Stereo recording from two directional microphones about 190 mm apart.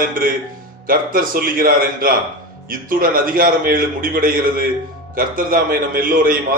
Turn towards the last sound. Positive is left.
turn(degrees=-50)  # may be behind; listen again after turning